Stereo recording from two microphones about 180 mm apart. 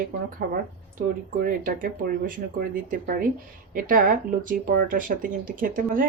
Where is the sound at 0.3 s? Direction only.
55° right (ahead or behind).